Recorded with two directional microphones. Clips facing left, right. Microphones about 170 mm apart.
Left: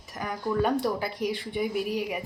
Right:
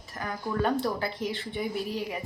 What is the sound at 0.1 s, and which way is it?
Speech, 15° left (ahead or behind).